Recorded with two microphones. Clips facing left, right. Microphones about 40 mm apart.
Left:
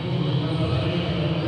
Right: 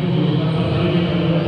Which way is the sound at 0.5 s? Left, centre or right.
Right.